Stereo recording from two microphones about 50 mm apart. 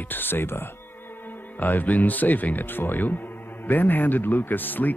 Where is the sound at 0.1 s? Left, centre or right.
Left.